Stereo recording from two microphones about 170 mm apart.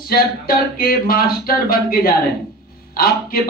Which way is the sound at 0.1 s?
60° left (ahead or behind).